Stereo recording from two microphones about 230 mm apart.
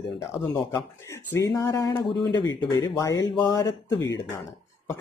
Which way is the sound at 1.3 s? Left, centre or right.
Centre.